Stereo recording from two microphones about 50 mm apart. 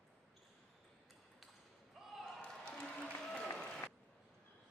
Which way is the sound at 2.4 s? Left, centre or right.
Centre.